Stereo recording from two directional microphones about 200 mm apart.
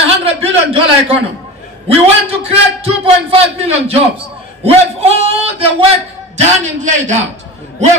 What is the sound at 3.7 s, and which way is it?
A man's voice, 30° right (ahead or behind).